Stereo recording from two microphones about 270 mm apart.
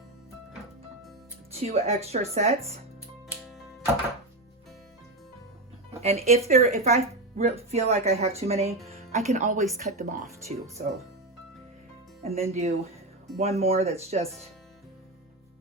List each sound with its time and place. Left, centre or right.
1.5 s speech: right
3.2 s music: centre
5.9 s speech: right
12.2 s speech: right